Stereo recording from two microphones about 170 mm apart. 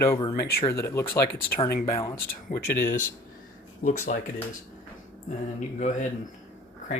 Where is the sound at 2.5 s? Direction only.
55° left (ahead or behind).